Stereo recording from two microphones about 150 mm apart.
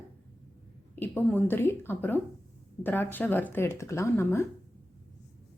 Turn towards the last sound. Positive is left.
turn(degrees=15)  # may be behind; listen again after turning